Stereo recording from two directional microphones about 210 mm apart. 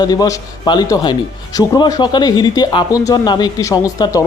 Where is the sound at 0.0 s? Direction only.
20° left (ahead or behind).